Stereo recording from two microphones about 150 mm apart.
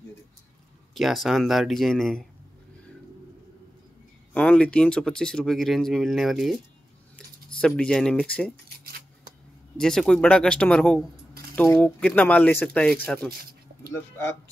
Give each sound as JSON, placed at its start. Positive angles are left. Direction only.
{"t": 0.9, "sound": "speech", "side_deg": 0}
{"t": 4.3, "sound": "speech", "side_deg": 10}
{"t": 9.8, "sound": "speech", "side_deg": 5}
{"t": 13.3, "sound": "a sound", "side_deg": -90}